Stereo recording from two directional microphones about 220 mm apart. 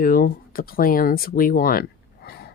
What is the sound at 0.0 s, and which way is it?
Speech, 40° left (ahead or behind).